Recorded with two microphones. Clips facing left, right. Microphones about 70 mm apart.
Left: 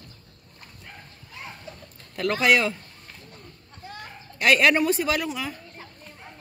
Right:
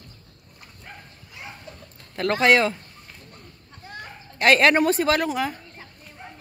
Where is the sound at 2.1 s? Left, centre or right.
Right.